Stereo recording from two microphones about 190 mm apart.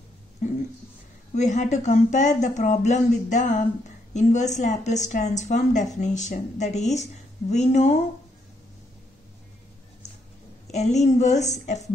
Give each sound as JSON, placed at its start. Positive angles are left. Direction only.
{"t": 1.3, "sound": "speech", "side_deg": 40}
{"t": 10.7, "sound": "speech", "side_deg": 35}